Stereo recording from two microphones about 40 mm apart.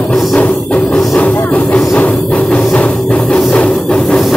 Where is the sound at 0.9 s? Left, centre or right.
Left.